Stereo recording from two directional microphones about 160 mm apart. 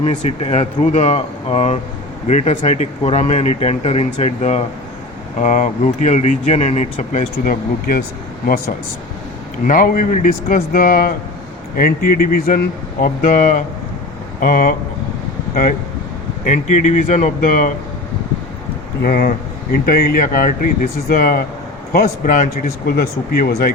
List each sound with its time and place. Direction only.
0.0 s speech: 35° left (ahead or behind); by 14.8 s 60° left (ahead or behind)
16.5 s speech: 45° left (ahead or behind)
19.0 s speech: 70° left (ahead or behind)